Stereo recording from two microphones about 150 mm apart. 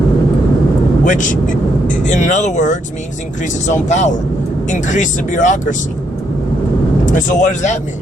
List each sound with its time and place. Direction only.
1.0 s speech: 55° left (ahead or behind)
7.0 s speech: 60° left (ahead or behind)